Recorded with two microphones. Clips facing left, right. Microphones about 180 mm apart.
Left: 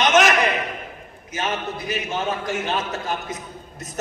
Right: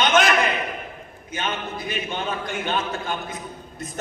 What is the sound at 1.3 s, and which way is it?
A man's voice, 40° left (ahead or behind).